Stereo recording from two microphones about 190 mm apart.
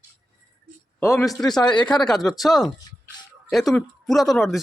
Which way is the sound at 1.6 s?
25° left (ahead or behind).